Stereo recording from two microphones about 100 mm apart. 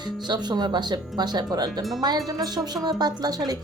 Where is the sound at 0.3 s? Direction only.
45° right (ahead or behind).